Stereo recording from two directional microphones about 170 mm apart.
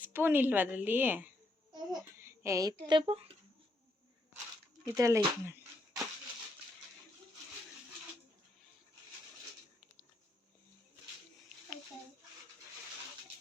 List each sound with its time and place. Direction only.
0.0 s a woman's voice: 10° right (ahead or behind)
2.8 s speech: 30° right (ahead or behind)
4.9 s speech: 15° right (ahead or behind)